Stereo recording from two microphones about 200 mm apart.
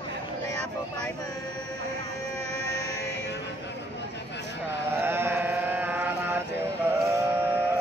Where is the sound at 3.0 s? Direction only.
60° left (ahead or behind).